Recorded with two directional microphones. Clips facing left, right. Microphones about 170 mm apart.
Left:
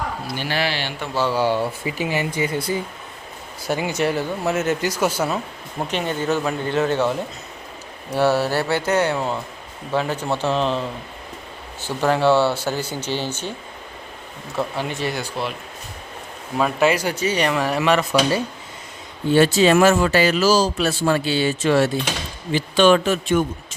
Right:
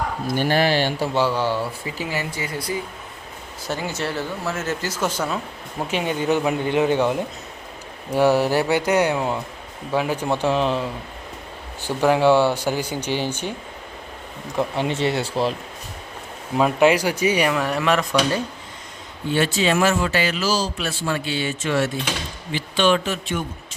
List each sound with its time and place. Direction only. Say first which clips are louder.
0.3 s speech: right 7 dB; 45° right (ahead or behind)
1.3 s speech: left 3 dB; 15° left (ahead or behind)
5.9 s speech: right 1 dB; 10° right (ahead or behind)
14.5 s speech: right 2 dB; 15° right (ahead or behind)
14.8 s speech: right 4 dB; 25° right (ahead or behind)
16.6 s speech: right 2 dB; 15° right (ahead or behind)
17.5 s speech: left 2 dB; centre (ahead or behind)
19.3 s a man's voice: left 6 dB; 40° left (ahead or behind)